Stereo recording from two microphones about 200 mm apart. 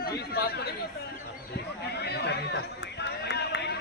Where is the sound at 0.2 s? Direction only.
50° left (ahead or behind).